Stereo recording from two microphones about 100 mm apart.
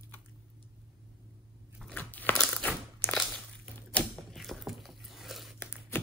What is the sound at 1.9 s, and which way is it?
Biting, 15° left (ahead or behind).